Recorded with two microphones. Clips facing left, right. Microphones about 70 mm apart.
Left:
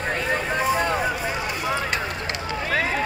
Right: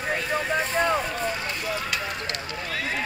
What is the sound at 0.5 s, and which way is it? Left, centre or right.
Boat, centre.